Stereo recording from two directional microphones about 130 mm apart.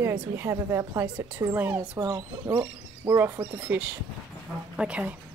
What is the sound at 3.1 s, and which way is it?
A woman's voice, 20° right (ahead or behind).